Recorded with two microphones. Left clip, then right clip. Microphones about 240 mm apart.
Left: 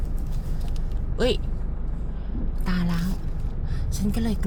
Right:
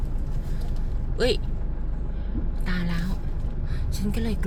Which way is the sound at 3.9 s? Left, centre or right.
Centre.